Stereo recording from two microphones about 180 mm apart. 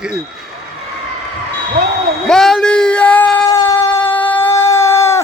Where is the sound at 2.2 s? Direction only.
Centre (ahead or behind).